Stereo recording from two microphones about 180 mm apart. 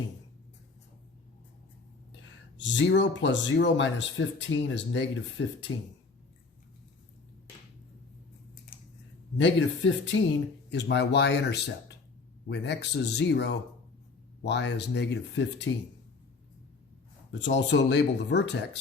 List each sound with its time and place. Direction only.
2.6 s speech: 90° left
9.4 s speech: 90° left
10.7 s speech: 75° left (ahead or behind)
17.3 s speech: 80° left